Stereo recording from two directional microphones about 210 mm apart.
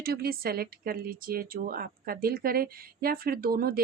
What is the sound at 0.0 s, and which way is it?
Speech, 45° right (ahead or behind).